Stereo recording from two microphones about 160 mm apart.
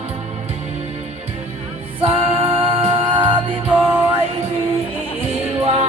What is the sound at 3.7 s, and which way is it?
Music, 10° right (ahead or behind).